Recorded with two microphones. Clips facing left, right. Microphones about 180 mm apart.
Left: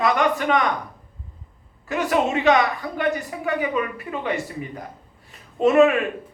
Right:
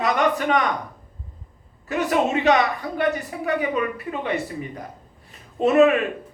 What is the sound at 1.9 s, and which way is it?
A woman's voice, 40° right (ahead or behind).